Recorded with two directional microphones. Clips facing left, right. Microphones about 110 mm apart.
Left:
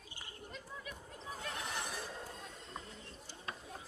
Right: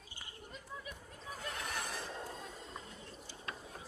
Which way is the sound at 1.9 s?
10° left (ahead or behind).